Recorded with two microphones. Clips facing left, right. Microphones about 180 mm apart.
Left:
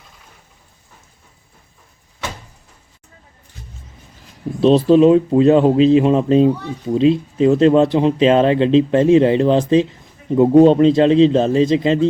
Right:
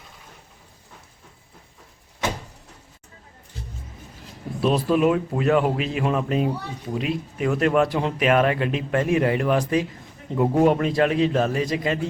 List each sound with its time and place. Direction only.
4.6 s speech: 25° left (ahead or behind)